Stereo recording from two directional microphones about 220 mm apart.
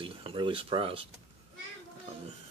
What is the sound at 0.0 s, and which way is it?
Speech, 25° right (ahead or behind).